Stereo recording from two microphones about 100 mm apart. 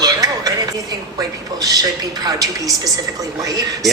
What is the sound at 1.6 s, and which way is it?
A man's voice, 40° right (ahead or behind).